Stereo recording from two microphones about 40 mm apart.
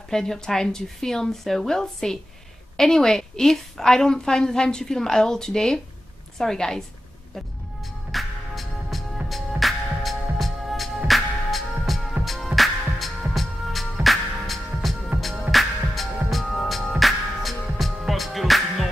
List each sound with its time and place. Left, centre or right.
0.1 s a woman's voice: centre
8.1 s music: centre